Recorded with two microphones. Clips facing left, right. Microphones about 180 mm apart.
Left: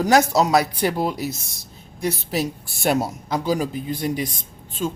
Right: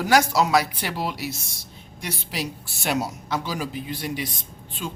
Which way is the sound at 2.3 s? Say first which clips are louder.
Left 6 dB; 50° left (ahead or behind).